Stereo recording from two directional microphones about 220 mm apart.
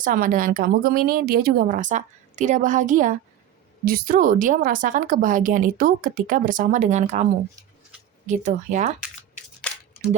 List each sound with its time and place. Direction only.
0.0 s speech: 40° right (ahead or behind)
8.3 s speech: 35° right (ahead or behind)